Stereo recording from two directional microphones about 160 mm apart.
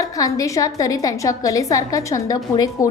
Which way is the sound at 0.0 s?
20° left (ahead or behind).